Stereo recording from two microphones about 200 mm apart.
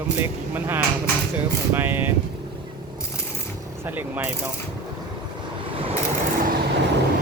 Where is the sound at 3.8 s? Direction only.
10° right (ahead or behind).